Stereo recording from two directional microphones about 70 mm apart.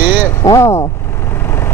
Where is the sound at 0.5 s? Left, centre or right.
Left.